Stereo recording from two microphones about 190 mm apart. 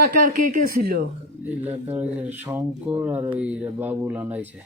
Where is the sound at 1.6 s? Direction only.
10° right (ahead or behind).